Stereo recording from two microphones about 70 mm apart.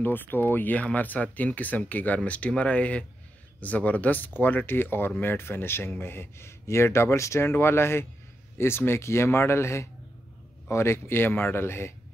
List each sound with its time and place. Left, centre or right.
0.0 s speech: left